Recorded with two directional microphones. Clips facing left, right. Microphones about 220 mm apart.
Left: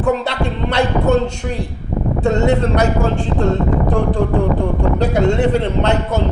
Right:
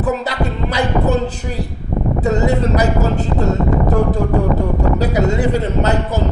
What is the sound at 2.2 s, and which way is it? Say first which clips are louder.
Speech: left 2 dB; 5° right (ahead or behind).